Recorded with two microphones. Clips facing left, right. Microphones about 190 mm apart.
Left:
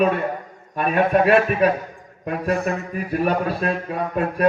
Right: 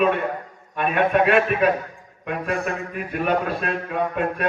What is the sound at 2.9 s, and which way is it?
Speech, 35° left (ahead or behind).